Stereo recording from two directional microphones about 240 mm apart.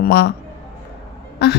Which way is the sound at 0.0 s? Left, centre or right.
Left.